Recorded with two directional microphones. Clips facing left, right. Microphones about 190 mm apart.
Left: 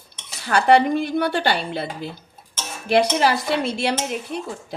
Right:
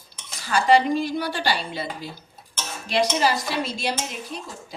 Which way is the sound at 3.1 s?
60° left (ahead or behind).